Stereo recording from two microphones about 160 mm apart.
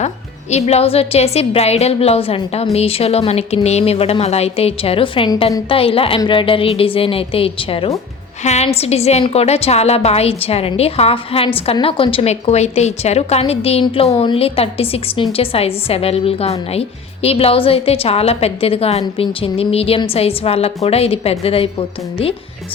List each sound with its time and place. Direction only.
0.5 s a woman's voice: 40° left (ahead or behind)